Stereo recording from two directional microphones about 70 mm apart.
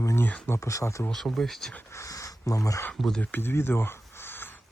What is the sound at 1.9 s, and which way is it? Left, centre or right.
Speech, left.